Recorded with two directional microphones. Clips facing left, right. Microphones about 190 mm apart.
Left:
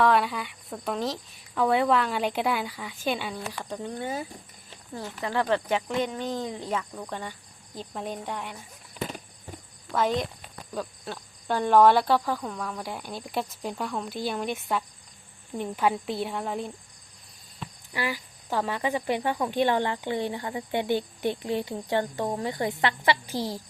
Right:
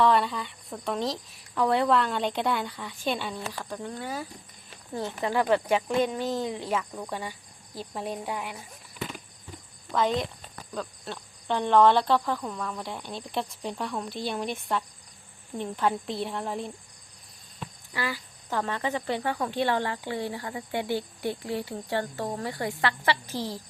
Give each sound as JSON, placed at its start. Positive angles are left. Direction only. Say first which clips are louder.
{"t": 0.0, "sound": "speech", "louder": "even", "side_deg": 5}
{"t": 3.6, "sound": "speech", "louder": "left 2 dB", "side_deg": 20}
{"t": 4.9, "sound": "speech", "louder": "right 2 dB", "side_deg": -15}
{"t": 9.0, "sound": "a sound", "louder": "left 3 dB", "side_deg": 40}
{"t": 9.9, "sound": "speech", "louder": "even", "side_deg": 0}
{"t": 17.9, "sound": "speech", "louder": "left 2 dB", "side_deg": 15}